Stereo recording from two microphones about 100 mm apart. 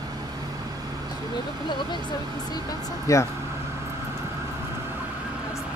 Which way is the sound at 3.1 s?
35° left (ahead or behind).